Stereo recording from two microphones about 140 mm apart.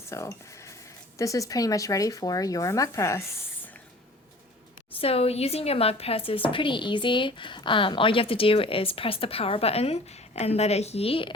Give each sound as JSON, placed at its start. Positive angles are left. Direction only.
{"t": 0.1, "sound": "speech", "side_deg": 20}
{"t": 4.9, "sound": "speech", "side_deg": 45}